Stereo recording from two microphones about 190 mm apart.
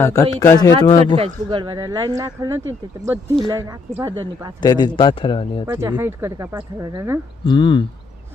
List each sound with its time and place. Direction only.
0.0 s speech: 15° left (ahead or behind)
1.1 s speech: 30° right (ahead or behind)
4.6 s speech: 20° left (ahead or behind)
5.6 s a woman's voice: 15° right (ahead or behind)
7.4 s speech: 25° left (ahead or behind)